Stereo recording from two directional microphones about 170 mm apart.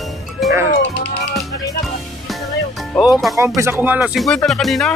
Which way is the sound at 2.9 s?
5° left (ahead or behind).